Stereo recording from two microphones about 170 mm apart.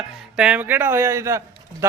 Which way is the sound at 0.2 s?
5° right (ahead or behind).